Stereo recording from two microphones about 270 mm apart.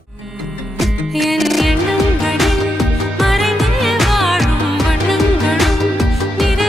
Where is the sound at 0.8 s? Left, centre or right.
Centre.